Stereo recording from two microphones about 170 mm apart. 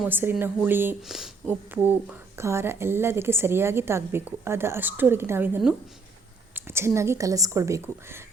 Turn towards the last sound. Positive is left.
turn(degrees=-15)  # may be behind; listen again after turning